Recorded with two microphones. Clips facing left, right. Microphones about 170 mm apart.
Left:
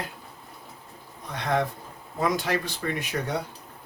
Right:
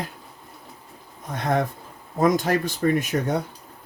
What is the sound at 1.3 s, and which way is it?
Speech, 45° right (ahead or behind).